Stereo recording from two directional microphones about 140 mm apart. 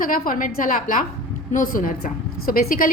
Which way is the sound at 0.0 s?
85° left.